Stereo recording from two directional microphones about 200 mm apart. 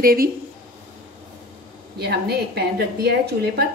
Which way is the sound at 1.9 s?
55° right (ahead or behind).